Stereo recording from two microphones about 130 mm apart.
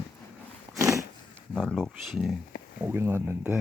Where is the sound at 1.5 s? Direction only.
5° left (ahead or behind).